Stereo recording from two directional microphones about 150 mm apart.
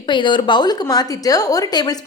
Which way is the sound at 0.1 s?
30° left (ahead or behind).